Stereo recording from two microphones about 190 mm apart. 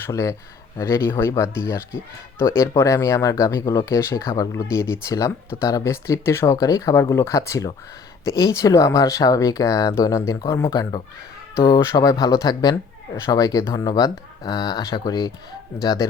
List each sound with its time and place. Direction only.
0.0 s speech: 15° left (ahead or behind)